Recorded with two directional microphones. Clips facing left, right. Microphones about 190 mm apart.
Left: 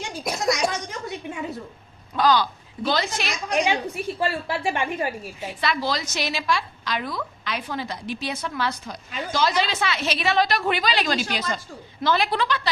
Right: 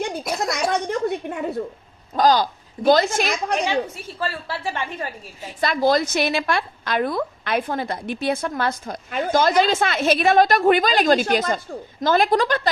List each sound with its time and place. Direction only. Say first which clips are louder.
0.5 s a sound: right 4 dB; 60° right (ahead or behind)
2.1 s a woman's voice: right 3 dB; 40° right (ahead or behind)
3.6 s a woman's voice: even; 15° left (ahead or behind)
5.5 s a woman's voice: right 8 dB; 45° right (ahead or behind)